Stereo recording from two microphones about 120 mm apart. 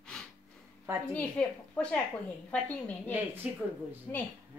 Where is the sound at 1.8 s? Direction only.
10° left (ahead or behind).